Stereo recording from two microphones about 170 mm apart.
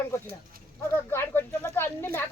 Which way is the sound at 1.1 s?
15° left (ahead or behind).